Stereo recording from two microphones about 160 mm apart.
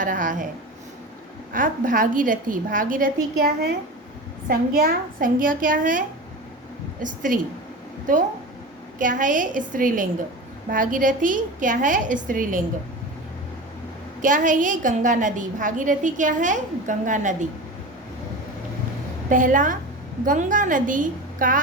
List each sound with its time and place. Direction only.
0.0 s a woman's voice: 55° right (ahead or behind)
1.5 s a woman's voice: 55° right (ahead or behind); by 3.8 s 75° right (ahead or behind)
4.4 s a woman's voice: 65° right (ahead or behind)
7.0 s a woman's voice: 55° right (ahead or behind)
14.2 s a woman's voice: 55° right (ahead or behind)
19.3 s a woman's voice: 55° right (ahead or behind)